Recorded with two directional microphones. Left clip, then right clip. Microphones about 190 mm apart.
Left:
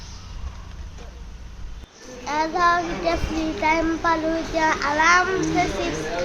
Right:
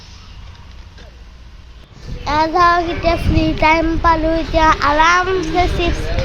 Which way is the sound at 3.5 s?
35° right (ahead or behind).